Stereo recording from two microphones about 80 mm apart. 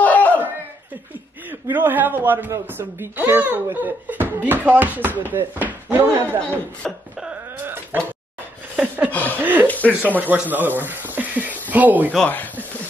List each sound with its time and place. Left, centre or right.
0.0 s a sound: centre
1.5 s speech: right
6.8 s throat clearing: centre
7.6 s a sound: right
9.1 s speech: left
9.4 s speech: right
9.7 s speech: centre
10.2 s speech: right
12.3 s speech: left